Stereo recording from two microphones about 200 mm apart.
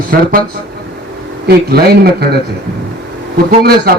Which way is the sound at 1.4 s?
50° right (ahead or behind).